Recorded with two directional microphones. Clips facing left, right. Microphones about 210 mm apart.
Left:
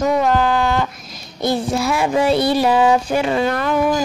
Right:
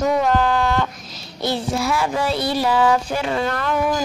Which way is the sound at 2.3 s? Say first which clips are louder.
Left 5 dB; 55° left (ahead or behind).